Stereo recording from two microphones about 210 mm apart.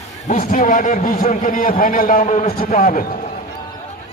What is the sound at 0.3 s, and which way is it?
A man's voice, 35° left (ahead or behind).